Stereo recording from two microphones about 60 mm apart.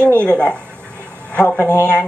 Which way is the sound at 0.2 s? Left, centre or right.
Centre.